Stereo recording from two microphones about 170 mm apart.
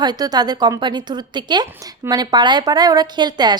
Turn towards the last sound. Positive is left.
turn(degrees=-25)  # may be behind; listen again after turning